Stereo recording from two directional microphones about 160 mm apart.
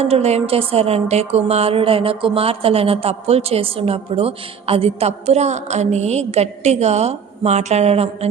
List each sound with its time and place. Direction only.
0.0 s speech: 40° right (ahead or behind)